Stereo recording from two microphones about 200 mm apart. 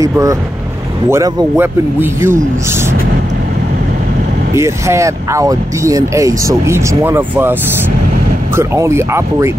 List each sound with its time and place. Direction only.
0.0 s speech: 15° right (ahead or behind)
4.6 s speech: 15° right (ahead or behind)
8.5 s speech: 15° right (ahead or behind)